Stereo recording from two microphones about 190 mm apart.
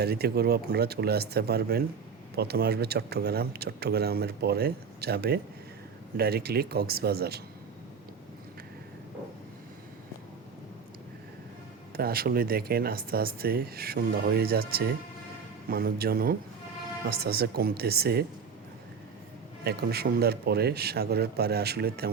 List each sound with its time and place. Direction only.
0.0 s speech: 55° right (ahead or behind)
11.9 s speech: 50° right (ahead or behind)
19.6 s speech: 55° right (ahead or behind)